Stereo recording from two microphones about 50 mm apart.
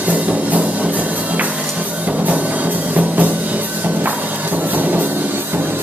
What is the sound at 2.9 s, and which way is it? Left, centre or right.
Music, right.